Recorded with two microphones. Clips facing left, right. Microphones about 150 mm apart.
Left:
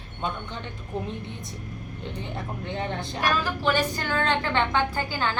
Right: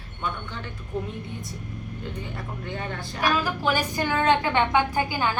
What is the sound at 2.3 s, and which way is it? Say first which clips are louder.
Speech: left 2 dB; 25° left (ahead or behind).